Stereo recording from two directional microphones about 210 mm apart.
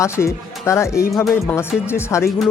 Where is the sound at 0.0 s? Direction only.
15° left (ahead or behind).